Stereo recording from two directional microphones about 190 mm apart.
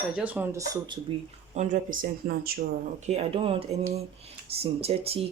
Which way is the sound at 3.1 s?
30° right (ahead or behind).